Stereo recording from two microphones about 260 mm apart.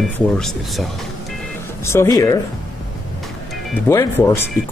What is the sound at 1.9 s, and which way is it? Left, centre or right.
Speech, centre.